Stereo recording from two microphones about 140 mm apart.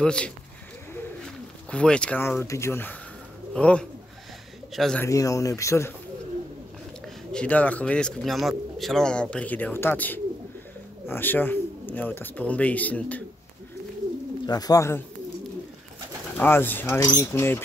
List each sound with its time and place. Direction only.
0.0 s speech: 5° left (ahead or behind)
1.7 s speech: 5° left (ahead or behind)
5.0 s speech: 25° left (ahead or behind)
7.3 s speech: 10° left (ahead or behind)
14.4 s speech: 30° left (ahead or behind)
16.3 s speech: 15° left (ahead or behind)